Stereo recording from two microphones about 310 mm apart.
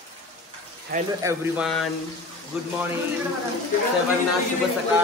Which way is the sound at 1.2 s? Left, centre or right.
Centre.